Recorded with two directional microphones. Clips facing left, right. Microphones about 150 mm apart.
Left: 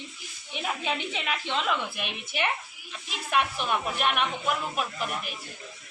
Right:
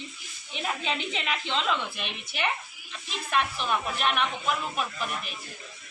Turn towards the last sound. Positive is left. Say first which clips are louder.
# left 1 dB
turn(degrees=5)  # may be behind; listen again after turning